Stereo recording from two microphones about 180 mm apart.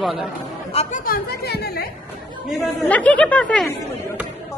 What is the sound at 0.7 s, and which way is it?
Speech, 50° left (ahead or behind).